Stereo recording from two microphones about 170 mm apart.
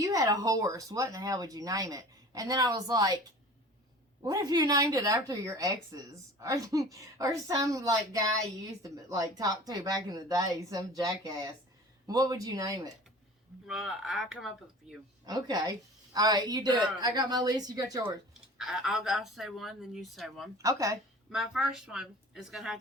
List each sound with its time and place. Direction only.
0.0 s speech: 20° right (ahead or behind)
4.2 s speech: 20° right (ahead or behind)
13.7 s speech: 5° right (ahead or behind)
15.3 s speech: 25° right (ahead or behind)
18.5 s speech: 5° right (ahead or behind)
20.6 s speech: 20° right (ahead or behind)
21.3 s speech: 5° right (ahead or behind)